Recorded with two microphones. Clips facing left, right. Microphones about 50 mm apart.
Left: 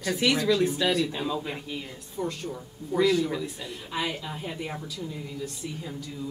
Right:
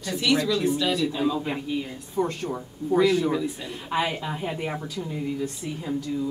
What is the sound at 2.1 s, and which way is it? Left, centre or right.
Speech, right.